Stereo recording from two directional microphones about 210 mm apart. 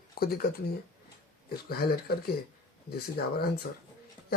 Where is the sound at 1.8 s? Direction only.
45° left (ahead or behind).